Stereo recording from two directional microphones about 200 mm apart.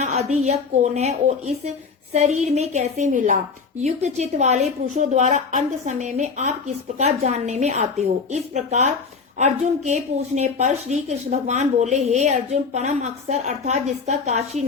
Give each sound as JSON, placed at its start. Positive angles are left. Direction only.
{"t": 0.0, "sound": "a woman's voice", "side_deg": -35}